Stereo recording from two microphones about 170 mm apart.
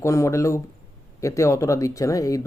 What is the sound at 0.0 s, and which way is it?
Speech, 15° left (ahead or behind).